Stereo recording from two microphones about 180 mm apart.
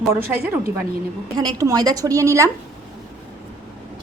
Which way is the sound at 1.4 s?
20° right (ahead or behind).